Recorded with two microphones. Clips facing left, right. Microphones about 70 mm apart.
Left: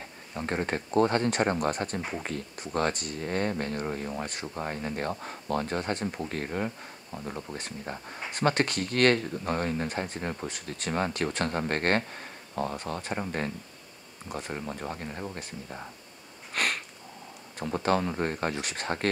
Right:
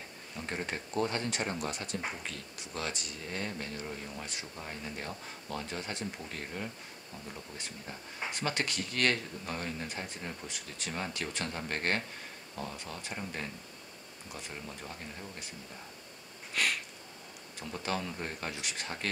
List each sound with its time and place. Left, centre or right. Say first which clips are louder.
0.4 s speech: left 7 dB; left
16.5 s a sound: left 3 dB; left
17.6 s speech: left 9 dB; left